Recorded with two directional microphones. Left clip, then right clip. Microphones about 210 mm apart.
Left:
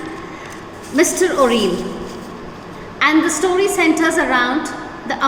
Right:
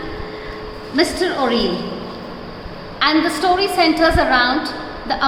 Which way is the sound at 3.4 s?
5° left (ahead or behind).